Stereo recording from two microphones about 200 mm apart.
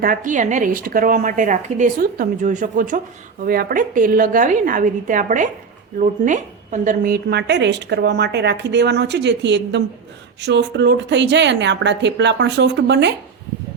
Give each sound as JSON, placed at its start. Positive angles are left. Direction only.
{"t": 0.0, "sound": "a woman's voice", "side_deg": -45}